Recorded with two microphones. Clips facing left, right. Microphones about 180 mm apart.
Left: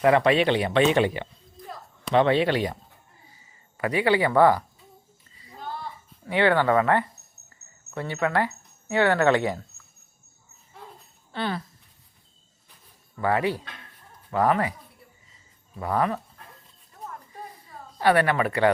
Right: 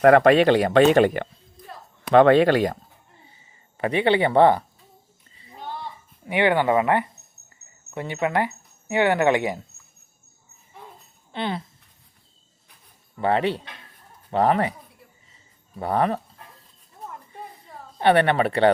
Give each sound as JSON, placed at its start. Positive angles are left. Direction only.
{"t": 0.0, "sound": "speech", "side_deg": -50}
{"t": 3.2, "sound": "a sound", "side_deg": -25}
{"t": 6.2, "sound": "speech", "side_deg": -15}
{"t": 11.3, "sound": "speech", "side_deg": -20}
{"t": 13.1, "sound": "speech", "side_deg": -25}
{"t": 15.8, "sound": "speech", "side_deg": -30}
{"t": 17.9, "sound": "speech", "side_deg": -25}